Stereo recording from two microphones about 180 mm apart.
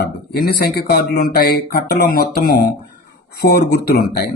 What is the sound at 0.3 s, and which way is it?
Speech, 60° left (ahead or behind).